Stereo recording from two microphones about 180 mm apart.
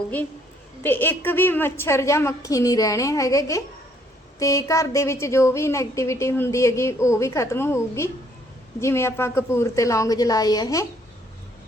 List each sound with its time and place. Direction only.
0.8 s a woman's voice: 10° left (ahead or behind)